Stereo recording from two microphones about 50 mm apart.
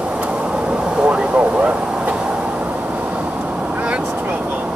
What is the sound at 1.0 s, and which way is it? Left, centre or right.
Vehicle, right.